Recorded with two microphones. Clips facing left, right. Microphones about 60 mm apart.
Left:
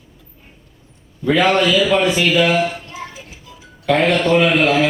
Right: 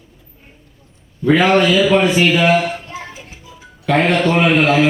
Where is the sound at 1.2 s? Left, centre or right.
Right.